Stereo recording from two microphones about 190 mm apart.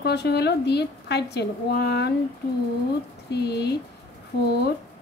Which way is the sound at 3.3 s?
60° left (ahead or behind).